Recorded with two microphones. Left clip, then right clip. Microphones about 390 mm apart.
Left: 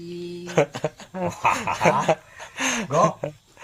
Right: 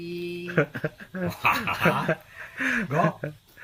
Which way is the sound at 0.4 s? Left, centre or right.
Centre.